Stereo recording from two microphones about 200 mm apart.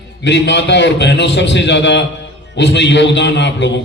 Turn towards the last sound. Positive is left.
turn(degrees=60)  # may be behind; listen again after turning